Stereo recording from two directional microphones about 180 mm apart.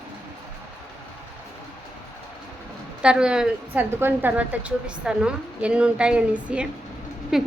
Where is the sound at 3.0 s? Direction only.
5° right (ahead or behind).